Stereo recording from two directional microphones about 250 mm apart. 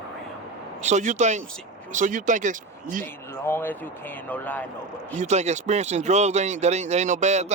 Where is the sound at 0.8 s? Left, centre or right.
Right.